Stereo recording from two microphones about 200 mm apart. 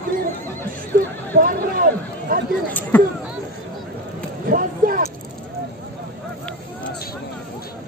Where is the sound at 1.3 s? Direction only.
45° right (ahead or behind).